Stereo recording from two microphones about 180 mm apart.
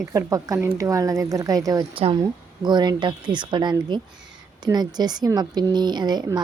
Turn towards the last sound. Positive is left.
turn(degrees=-20)  # may be behind; listen again after turning